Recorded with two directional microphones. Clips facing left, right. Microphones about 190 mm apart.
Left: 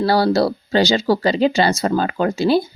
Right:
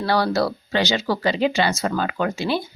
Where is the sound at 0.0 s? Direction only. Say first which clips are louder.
Left 5 dB; 35° left (ahead or behind).